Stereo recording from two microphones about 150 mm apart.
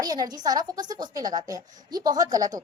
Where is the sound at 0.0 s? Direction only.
25° right (ahead or behind).